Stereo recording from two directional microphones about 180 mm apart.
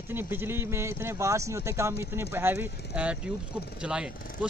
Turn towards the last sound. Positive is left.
turn(degrees=-5)  # may be behind; listen again after turning